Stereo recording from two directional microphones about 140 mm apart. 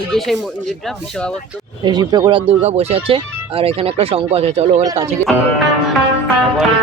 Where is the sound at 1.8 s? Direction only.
30° right (ahead or behind); by 4.8 s 50° right (ahead or behind).